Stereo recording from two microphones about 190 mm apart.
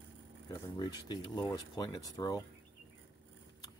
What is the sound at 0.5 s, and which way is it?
Speech, 20° left (ahead or behind).